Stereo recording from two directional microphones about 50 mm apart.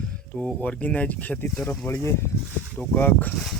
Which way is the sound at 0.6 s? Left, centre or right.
Left.